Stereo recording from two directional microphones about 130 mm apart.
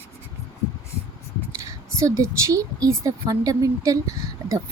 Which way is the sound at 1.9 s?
25° right (ahead or behind).